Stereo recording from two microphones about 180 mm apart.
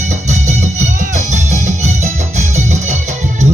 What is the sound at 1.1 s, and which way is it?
Music, 40° right (ahead or behind).